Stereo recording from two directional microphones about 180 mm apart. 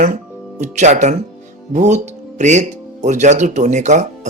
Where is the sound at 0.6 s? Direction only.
40° right (ahead or behind).